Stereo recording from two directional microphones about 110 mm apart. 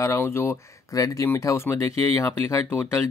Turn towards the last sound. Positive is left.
turn(degrees=20)  # may be behind; listen again after turning